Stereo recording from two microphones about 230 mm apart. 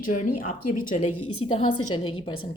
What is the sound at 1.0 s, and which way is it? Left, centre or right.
Speech, left.